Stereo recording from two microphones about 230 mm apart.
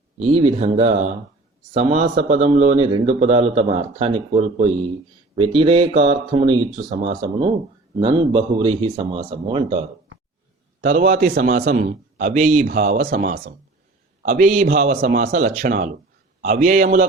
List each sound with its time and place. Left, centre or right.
0.2 s a man's voice: right
10.8 s a man's voice: right